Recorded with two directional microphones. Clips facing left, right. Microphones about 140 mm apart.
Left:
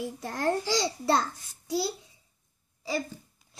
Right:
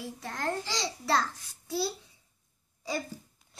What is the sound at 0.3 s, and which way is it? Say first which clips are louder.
A child's voice: left 6 dB; 30° left (ahead or behind).